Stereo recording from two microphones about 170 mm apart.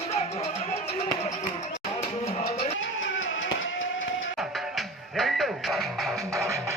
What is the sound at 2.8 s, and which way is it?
Music, 90° left.